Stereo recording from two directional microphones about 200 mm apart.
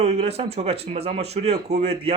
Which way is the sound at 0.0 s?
30° right (ahead or behind).